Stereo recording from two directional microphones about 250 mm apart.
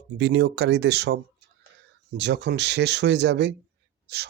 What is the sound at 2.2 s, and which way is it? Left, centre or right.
Speech, right.